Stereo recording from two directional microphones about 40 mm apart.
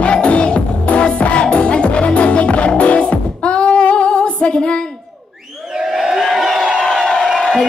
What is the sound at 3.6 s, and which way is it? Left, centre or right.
Female singing, left.